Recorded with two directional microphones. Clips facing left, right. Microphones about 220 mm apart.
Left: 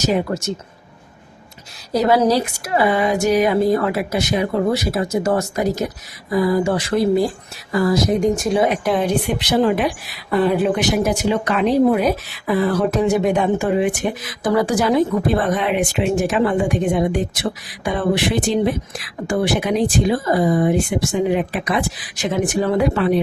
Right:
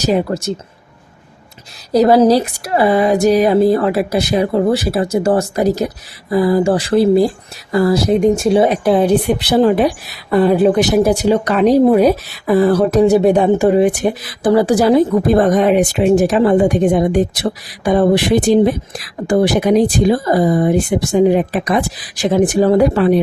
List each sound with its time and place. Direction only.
0.0 s speech: 35° right (ahead or behind)
1.9 s speech: 35° right (ahead or behind)